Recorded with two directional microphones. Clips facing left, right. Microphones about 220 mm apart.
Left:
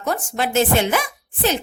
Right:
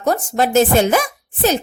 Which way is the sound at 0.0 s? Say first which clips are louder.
Right 6 dB; 40° right (ahead or behind).